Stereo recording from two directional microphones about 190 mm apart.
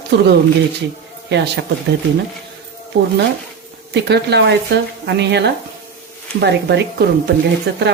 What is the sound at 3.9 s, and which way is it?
Speech, 60° right (ahead or behind).